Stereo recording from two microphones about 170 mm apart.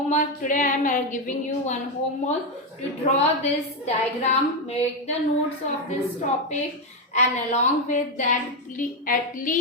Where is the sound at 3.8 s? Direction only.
40° left (ahead or behind).